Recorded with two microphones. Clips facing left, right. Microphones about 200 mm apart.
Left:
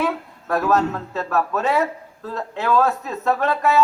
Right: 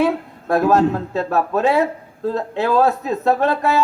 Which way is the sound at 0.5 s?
30° right (ahead or behind).